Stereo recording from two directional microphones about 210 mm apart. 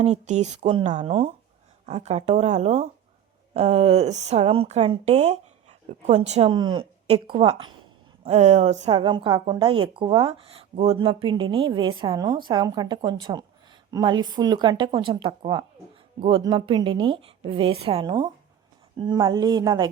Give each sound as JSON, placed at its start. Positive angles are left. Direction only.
{"t": 0.0, "sound": "a woman's voice", "side_deg": -35}
{"t": 6.5, "sound": "speech", "side_deg": -20}